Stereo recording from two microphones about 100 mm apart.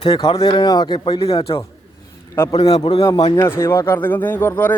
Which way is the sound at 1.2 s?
70° left (ahead or behind).